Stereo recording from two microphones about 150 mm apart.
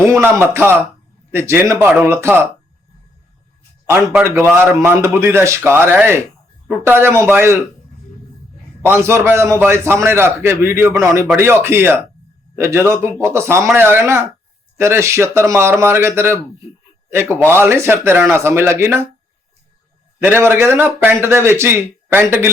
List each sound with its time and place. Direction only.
0.0 s speech: 15° right (ahead or behind)
3.8 s speech: 15° right (ahead or behind)
8.8 s speech: 15° right (ahead or behind)
20.2 s speech: 15° right (ahead or behind)